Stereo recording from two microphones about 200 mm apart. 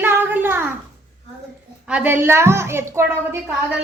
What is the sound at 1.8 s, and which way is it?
A woman's voice, 10° right (ahead or behind).